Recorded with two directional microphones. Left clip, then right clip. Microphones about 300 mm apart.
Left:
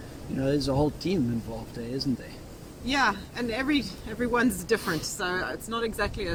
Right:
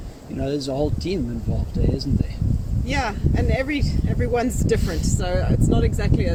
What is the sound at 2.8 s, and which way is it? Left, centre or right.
Speech, centre.